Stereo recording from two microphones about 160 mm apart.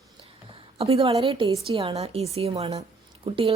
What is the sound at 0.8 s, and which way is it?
A woman's voice, 40° right (ahead or behind).